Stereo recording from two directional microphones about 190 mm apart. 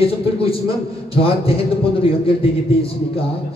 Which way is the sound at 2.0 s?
30° left (ahead or behind).